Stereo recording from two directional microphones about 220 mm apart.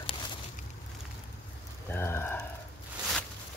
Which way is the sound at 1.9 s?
10° left (ahead or behind).